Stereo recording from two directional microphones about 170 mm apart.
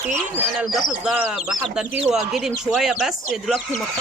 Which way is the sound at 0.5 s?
Centre (ahead or behind).